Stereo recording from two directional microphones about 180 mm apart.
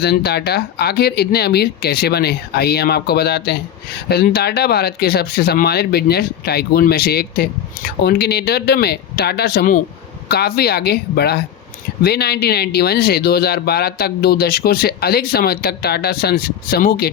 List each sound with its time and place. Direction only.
0.0 s speech: 60° left (ahead or behind)